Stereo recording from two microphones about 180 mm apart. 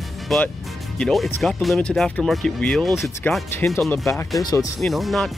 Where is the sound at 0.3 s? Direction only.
Centre (ahead or behind).